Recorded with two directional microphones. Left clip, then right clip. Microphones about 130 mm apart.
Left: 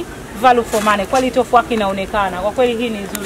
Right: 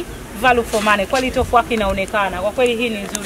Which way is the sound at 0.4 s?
Centre (ahead or behind).